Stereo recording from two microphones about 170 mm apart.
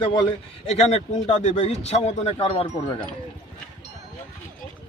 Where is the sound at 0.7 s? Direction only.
40° left (ahead or behind).